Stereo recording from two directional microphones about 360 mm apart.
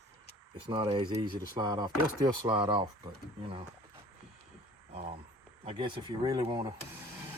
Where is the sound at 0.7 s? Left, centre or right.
Centre.